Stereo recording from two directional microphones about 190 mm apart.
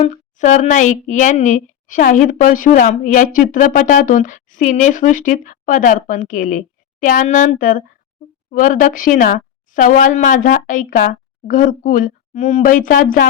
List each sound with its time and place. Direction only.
0.0 s a woman's voice: 40° left (ahead or behind)